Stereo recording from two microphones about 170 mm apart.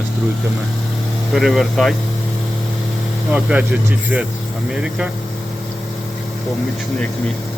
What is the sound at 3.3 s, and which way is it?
Speech, 5° right (ahead or behind).